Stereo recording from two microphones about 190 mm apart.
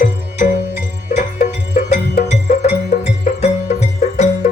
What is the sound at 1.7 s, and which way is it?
Music, 35° left (ahead or behind).